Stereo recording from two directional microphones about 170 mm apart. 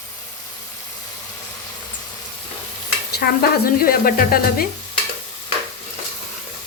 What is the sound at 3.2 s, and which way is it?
Speech, 60° left (ahead or behind).